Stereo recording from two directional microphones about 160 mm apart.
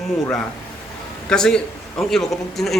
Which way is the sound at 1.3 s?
5° left (ahead or behind).